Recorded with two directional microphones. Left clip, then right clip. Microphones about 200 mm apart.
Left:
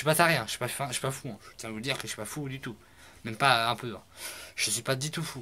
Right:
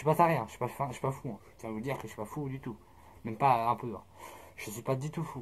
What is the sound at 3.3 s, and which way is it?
Speech, 55° left (ahead or behind).